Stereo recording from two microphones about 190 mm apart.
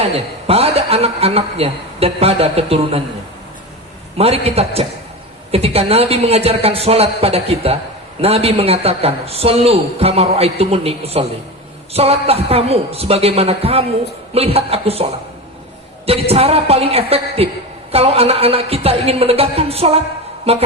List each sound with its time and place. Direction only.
0.0 s a woman's voice: 30° right (ahead or behind)
4.2 s a man's voice: 30° right (ahead or behind)
16.0 s a man's voice: 30° right (ahead or behind)